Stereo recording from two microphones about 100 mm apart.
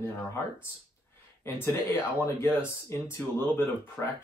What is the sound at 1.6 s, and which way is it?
Speech, 25° left (ahead or behind).